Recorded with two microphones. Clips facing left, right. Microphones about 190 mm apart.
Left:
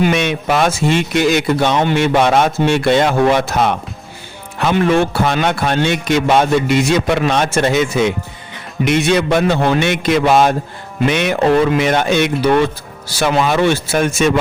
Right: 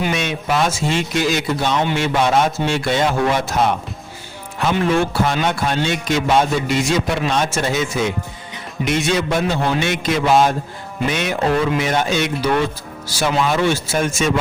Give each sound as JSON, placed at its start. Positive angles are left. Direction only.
{"t": 0.0, "sound": "speech", "side_deg": 60}